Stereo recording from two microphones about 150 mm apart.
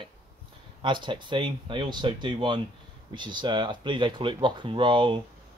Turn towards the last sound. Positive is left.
turn(degrees=-30)  # may be behind; listen again after turning